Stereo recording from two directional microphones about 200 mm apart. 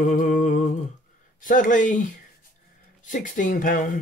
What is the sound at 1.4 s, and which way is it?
Speech, 40° left (ahead or behind).